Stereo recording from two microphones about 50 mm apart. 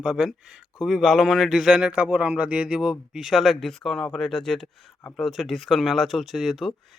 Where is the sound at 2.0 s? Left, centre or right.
Right.